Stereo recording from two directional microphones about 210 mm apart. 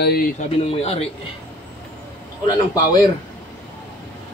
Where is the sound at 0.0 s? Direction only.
45° left (ahead or behind).